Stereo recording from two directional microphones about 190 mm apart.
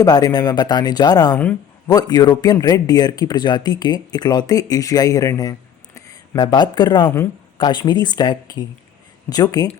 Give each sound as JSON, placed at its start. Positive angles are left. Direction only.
{"t": 0.0, "sound": "speech", "side_deg": 20}